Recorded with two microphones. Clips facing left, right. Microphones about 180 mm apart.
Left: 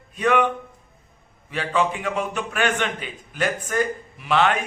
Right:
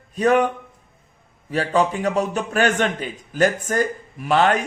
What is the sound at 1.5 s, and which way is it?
A man's voice, 40° right (ahead or behind).